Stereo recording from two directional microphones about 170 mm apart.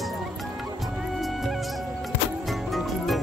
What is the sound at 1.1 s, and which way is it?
Music, centre (ahead or behind).